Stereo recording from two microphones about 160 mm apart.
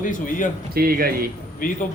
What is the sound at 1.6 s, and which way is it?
Speech, 60° left (ahead or behind).